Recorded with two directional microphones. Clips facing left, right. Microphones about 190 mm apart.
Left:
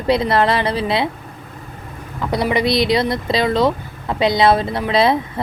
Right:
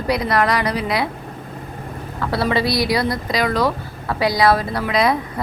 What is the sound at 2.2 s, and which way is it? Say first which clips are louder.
A woman's voice: left 1 dB; 20° left (ahead or behind).